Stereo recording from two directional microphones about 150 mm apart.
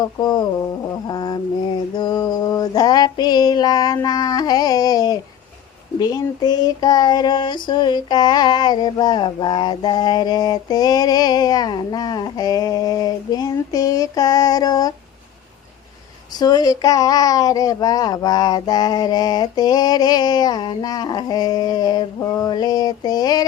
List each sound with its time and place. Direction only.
0.0 s child singing: 30° left (ahead or behind)
2.0 s a sound: 25° left (ahead or behind)
3.9 s child singing: 25° left (ahead or behind)
16.3 s child singing: 25° left (ahead or behind)